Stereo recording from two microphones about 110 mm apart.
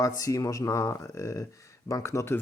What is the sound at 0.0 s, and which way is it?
Speech, 30° left (ahead or behind).